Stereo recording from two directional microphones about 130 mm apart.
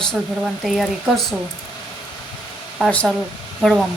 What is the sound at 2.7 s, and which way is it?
Speech, 5° left (ahead or behind).